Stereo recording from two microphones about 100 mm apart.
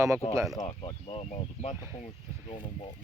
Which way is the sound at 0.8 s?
65° left (ahead or behind).